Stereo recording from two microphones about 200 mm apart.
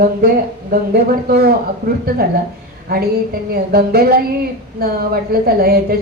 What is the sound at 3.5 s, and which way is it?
Speech, 50° right (ahead or behind).